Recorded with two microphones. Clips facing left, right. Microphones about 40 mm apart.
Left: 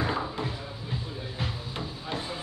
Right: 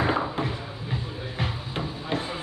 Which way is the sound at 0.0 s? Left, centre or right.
Right.